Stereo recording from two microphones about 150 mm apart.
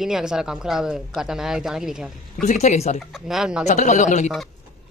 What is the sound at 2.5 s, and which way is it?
Speech, 50° left (ahead or behind).